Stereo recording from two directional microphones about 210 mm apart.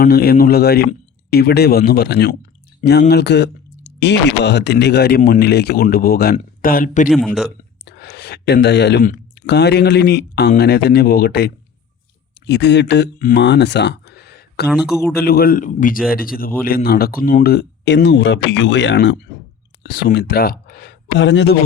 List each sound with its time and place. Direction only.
0.0 s speech: 45° left (ahead or behind)
7.1 s a man's voice: centre (ahead or behind)
7.9 s speech: 50° left (ahead or behind)
14.7 s a man's voice: 5° right (ahead or behind)
15.1 s speech: 45° left (ahead or behind)